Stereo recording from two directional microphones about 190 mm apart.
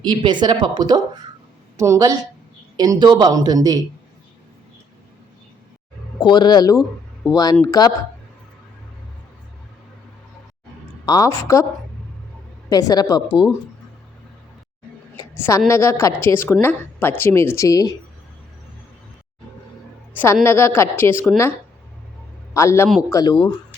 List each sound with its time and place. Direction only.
0.0 s a woman's voice: 25° right (ahead or behind)
6.1 s speech: 25° left (ahead or behind)
7.2 s speech: centre (ahead or behind)
7.7 s speech: 20° left (ahead or behind)
11.0 s a woman's voice: 20° left (ahead or behind)
12.7 s speech: 20° left (ahead or behind)
15.1 s a woman's voice: 15° left (ahead or behind)
20.4 s a woman's voice: 15° left (ahead or behind)
22.5 s a woman's voice: 15° left (ahead or behind)